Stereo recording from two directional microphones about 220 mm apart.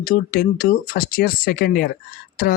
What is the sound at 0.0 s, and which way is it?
Speech, 40° left (ahead or behind).